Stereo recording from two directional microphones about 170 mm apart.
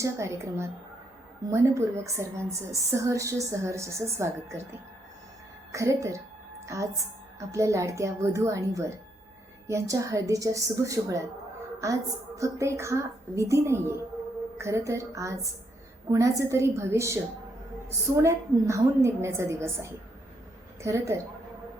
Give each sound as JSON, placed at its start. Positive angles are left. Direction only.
{"t": 0.0, "sound": "a woman's voice", "side_deg": -15}
{"t": 5.7, "sound": "a woman's voice", "side_deg": -20}